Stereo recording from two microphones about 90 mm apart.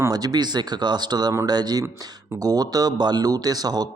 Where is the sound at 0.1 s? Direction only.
45° right (ahead or behind).